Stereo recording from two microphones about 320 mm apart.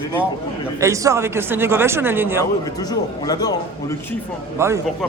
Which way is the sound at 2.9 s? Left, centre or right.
Centre.